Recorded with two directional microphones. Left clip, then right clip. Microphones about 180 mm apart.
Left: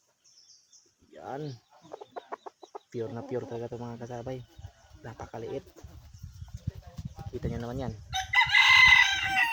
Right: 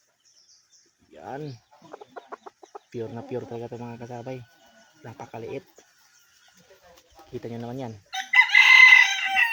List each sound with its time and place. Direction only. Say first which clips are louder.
1.1 s speech: right 2 dB; 25° right (ahead or behind)
1.9 s chicken: even; 15° left (ahead or behind)
2.9 s speech: right 2 dB; 25° right (ahead or behind)
7.4 s speech: right 1 dB; 25° right (ahead or behind)
8.1 s chicken: right 6 dB; 65° left (ahead or behind)